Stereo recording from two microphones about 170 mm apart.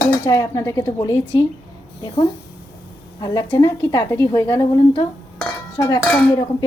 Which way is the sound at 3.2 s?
25° left (ahead or behind).